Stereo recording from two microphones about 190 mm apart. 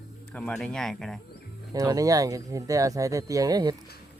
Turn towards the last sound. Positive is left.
turn(degrees=-20)  # may be behind; listen again after turning